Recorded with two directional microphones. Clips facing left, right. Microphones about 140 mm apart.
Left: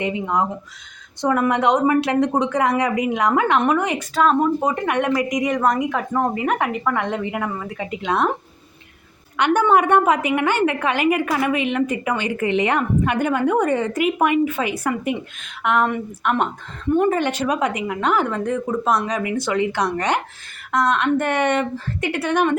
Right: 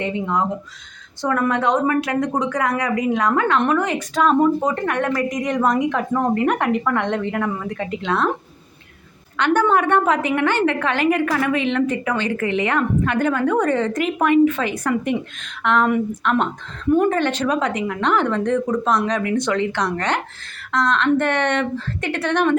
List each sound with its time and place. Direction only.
0.0 s a woman's voice: 15° left (ahead or behind)
4.1 s a woman's voice: centre (ahead or behind)
5.5 s a woman's voice: centre (ahead or behind)
9.4 s a woman's voice: 10° left (ahead or behind)